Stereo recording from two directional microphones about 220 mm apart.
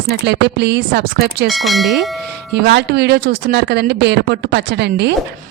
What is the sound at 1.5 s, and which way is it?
Speech, centre (ahead or behind).